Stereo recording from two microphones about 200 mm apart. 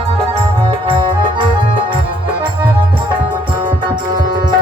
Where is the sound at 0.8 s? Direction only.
25° right (ahead or behind).